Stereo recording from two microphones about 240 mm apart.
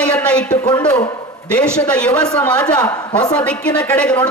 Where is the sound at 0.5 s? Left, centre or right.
Centre.